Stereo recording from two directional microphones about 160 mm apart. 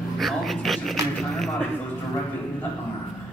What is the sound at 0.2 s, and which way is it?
Speech, centre (ahead or behind).